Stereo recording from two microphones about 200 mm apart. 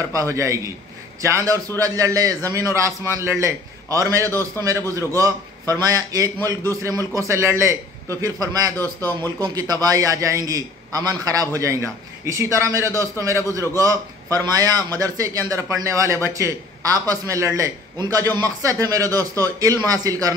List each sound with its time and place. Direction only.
0.0 s a man's voice: 15° right (ahead or behind)